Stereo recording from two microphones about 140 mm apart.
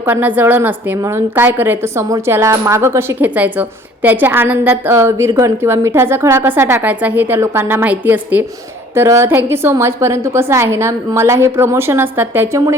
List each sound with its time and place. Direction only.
0.0 s a woman's voice: 15° right (ahead or behind)